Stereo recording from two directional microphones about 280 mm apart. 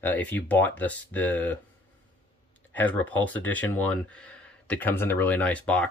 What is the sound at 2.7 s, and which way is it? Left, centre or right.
Speech, centre.